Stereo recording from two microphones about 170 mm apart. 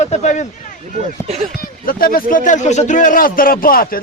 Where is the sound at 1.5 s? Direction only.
60° left (ahead or behind).